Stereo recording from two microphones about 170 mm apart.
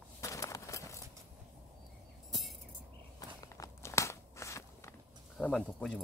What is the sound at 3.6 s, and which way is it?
Crunch, 15° left (ahead or behind).